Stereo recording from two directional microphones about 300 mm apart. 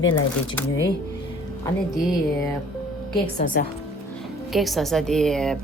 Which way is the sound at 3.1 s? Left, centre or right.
Left.